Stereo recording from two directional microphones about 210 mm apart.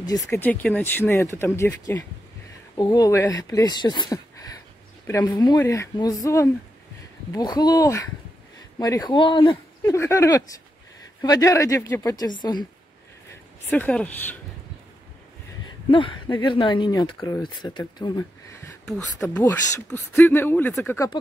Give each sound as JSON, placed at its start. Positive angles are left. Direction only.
{"t": 0.0, "sound": "speech", "side_deg": 15}
{"t": 13.7, "sound": "speech", "side_deg": 5}
{"t": 15.9, "sound": "speech", "side_deg": 25}
{"t": 18.9, "sound": "speech", "side_deg": 5}